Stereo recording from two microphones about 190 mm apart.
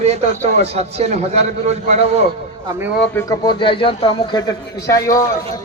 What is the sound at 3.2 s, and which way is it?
A man's voice, 20° left (ahead or behind).